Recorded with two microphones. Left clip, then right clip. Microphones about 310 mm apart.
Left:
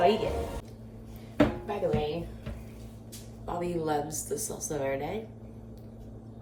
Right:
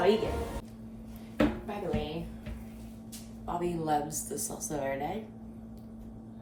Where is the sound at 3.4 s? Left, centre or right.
Centre.